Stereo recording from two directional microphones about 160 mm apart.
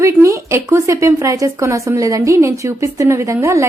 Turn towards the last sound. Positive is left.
turn(degrees=-20)  # may be behind; listen again after turning